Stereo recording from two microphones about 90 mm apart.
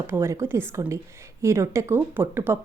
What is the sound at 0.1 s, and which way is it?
A woman's voice, 30° right (ahead or behind).